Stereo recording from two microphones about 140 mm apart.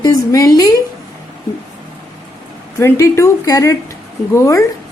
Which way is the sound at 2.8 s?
20° left (ahead or behind).